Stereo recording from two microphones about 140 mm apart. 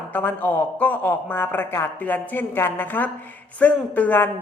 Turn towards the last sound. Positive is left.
turn(degrees=10)  # may be behind; listen again after turning